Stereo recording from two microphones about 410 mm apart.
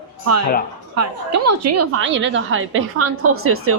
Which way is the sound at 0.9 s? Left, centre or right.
Right.